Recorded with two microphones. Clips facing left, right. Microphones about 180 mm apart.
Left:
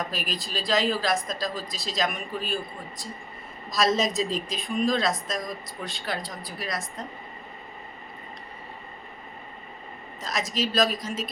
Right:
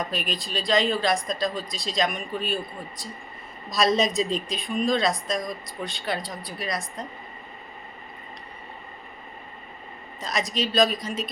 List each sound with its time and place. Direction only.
0.0 s a woman's voice: centre (ahead or behind)
3.7 s a woman's voice: centre (ahead or behind)
10.2 s a woman's voice: centre (ahead or behind)